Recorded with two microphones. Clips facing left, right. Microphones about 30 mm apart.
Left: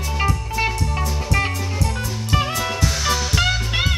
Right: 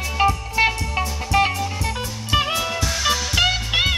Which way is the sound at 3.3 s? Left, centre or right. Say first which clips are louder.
Right 2 dB; centre.